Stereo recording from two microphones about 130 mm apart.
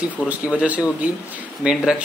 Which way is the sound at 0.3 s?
10° right (ahead or behind).